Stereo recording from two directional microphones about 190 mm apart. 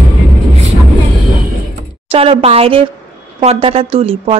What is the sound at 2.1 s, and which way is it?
A woman's voice, 30° right (ahead or behind).